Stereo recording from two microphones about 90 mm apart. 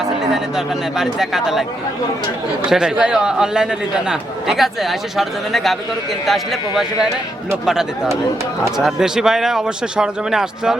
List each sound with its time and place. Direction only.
0.3 s a man's voice: 5° right (ahead or behind)
2.6 s a man's voice: 10° right (ahead or behind)